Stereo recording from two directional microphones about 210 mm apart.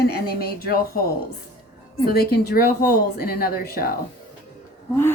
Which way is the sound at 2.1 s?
45° left (ahead or behind).